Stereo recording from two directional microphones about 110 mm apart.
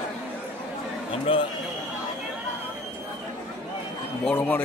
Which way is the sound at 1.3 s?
60° left (ahead or behind).